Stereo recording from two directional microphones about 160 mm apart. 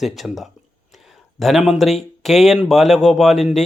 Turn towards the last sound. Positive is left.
turn(degrees=0)  # may be behind; listen again after turning